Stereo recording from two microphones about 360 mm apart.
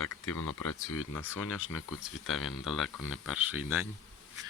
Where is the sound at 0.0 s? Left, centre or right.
Left.